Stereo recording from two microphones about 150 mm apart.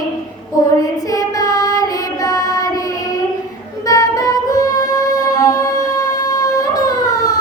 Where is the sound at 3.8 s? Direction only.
25° left (ahead or behind).